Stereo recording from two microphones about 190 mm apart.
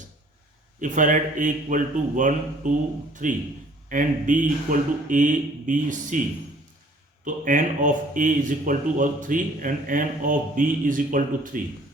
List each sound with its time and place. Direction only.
0.8 s speech: 40° right (ahead or behind)
7.3 s speech: 45° right (ahead or behind)